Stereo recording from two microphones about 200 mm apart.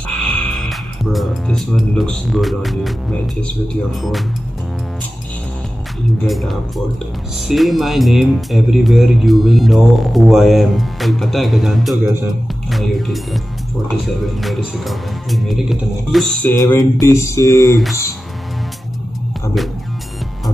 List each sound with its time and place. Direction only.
0.3 s speech: centre (ahead or behind)
6.2 s speech: centre (ahead or behind)
16.5 s mantra: 15° left (ahead or behind)